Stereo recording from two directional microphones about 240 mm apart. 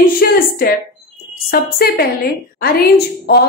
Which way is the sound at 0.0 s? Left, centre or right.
Left.